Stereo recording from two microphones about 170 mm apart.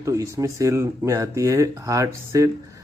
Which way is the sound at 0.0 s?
20° right (ahead or behind).